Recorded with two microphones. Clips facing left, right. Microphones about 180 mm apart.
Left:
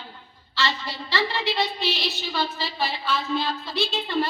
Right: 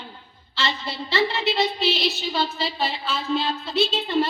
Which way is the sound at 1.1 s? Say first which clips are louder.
Right 3 dB; 20° right (ahead or behind).